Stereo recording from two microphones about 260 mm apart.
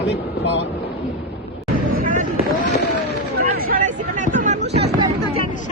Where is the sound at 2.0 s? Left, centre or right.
Right.